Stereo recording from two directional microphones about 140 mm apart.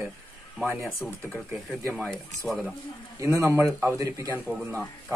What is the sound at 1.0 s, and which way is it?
Speech, 15° left (ahead or behind).